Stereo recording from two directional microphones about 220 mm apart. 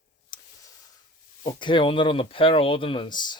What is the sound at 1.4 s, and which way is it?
Speech, 20° left (ahead or behind).